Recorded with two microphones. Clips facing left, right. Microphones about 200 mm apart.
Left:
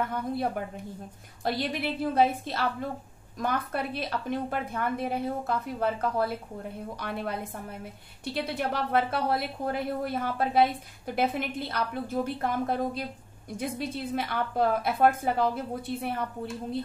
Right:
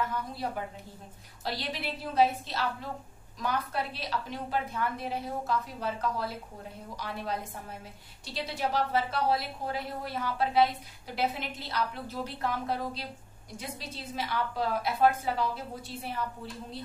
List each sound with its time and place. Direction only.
0.1 s a woman's voice: 55° left (ahead or behind)